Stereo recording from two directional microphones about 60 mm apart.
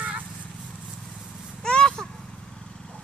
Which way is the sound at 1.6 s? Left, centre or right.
Centre.